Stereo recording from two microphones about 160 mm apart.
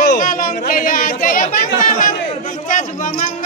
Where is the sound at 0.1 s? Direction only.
60° left (ahead or behind).